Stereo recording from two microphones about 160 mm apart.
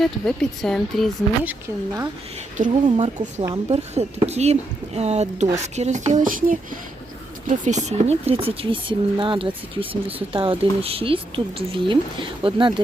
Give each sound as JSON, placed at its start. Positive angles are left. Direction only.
{"t": 0.0, "sound": "speech", "side_deg": 0}
{"t": 2.6, "sound": "speech", "side_deg": -55}